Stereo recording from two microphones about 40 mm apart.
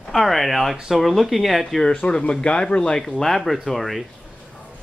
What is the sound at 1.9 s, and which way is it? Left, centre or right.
Speech, left.